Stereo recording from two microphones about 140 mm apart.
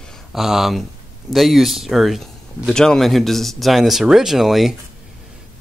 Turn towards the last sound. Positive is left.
turn(degrees=0)  # may be behind; listen again after turning